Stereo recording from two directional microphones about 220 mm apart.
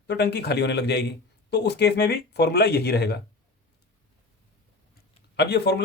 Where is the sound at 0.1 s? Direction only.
50° left (ahead or behind).